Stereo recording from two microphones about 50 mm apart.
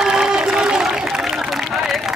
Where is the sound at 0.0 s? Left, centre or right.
Centre.